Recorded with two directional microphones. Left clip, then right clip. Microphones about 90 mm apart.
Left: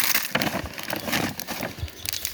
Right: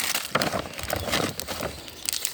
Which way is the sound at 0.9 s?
5° right (ahead or behind).